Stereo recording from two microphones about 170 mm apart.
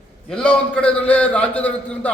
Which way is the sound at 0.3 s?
5° left (ahead or behind).